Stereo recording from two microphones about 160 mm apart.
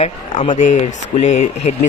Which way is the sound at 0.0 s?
45° left (ahead or behind).